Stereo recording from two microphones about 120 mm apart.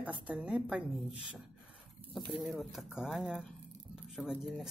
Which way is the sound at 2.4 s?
Centre (ahead or behind).